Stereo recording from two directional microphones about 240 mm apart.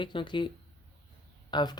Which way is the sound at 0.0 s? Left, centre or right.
Centre.